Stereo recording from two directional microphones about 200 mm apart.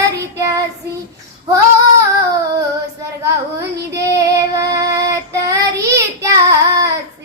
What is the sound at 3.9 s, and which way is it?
Child singing, 15° right (ahead or behind).